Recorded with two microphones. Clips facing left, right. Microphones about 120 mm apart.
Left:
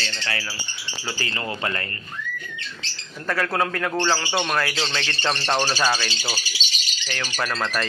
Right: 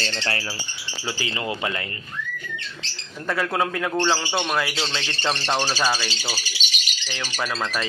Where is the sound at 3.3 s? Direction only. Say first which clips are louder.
Even; 5° right (ahead or behind).